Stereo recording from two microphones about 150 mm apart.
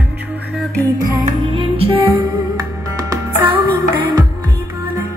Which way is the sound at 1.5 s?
35° right (ahead or behind).